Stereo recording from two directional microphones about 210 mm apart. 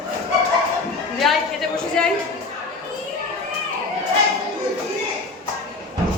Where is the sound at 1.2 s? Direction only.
Centre (ahead or behind).